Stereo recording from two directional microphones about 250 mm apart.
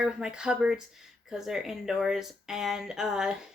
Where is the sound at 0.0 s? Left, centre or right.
Centre.